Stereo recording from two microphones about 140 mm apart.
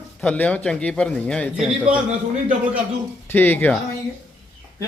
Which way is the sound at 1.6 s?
5° right (ahead or behind).